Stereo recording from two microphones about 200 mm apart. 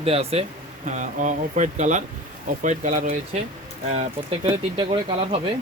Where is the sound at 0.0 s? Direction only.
30° right (ahead or behind).